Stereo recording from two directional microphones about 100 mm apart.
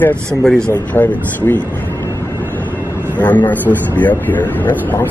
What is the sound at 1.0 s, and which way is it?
Speech, 20° left (ahead or behind).